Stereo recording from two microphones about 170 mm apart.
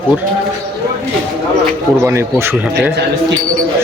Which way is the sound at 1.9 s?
15° right (ahead or behind).